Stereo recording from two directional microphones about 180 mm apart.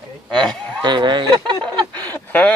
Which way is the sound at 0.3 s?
5° left (ahead or behind).